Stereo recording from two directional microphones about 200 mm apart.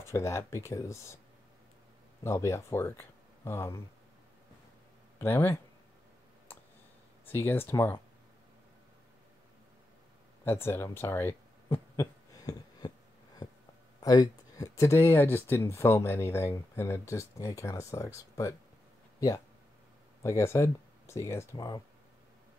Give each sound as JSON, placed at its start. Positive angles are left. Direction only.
{"t": 0.0, "sound": "speech", "side_deg": 15}
{"t": 2.2, "sound": "speech", "side_deg": 15}
{"t": 5.2, "sound": "speech", "side_deg": 10}
{"t": 7.2, "sound": "speech", "side_deg": 10}
{"t": 10.4, "sound": "speech", "side_deg": 10}
{"t": 13.4, "sound": "a sound", "side_deg": 20}
{"t": 14.0, "sound": "speech", "side_deg": 20}
{"t": 19.1, "sound": "a sound", "side_deg": 15}
{"t": 20.2, "sound": "speech", "side_deg": 15}